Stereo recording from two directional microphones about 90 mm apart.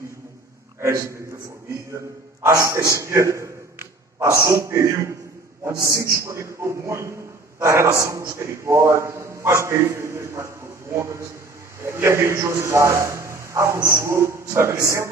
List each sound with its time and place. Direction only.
0.7 s a man's voice: 30° right (ahead or behind)
2.4 s a man's voice: 35° right (ahead or behind)